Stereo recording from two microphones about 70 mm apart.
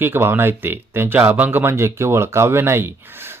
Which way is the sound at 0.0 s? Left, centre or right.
Right.